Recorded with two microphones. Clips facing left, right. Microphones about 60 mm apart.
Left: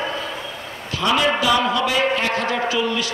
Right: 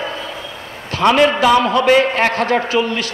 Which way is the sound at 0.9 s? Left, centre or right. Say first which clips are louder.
Right 6 dB; right.